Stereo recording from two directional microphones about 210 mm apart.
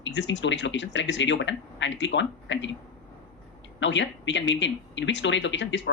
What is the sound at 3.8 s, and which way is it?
A man's voice, 60° left (ahead or behind).